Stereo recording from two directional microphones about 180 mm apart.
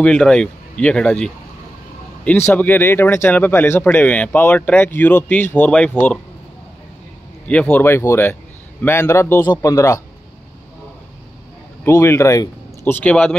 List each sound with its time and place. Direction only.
0.0 s speech: 5° left (ahead or behind)
2.4 s speech: 10° left (ahead or behind)
7.4 s speech: 5° left (ahead or behind)
11.8 s speech: 15° left (ahead or behind)